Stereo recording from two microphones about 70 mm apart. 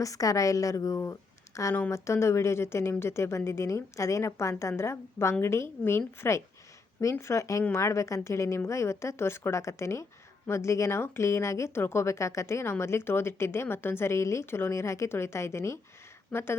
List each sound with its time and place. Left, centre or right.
0.0 s a woman's voice: left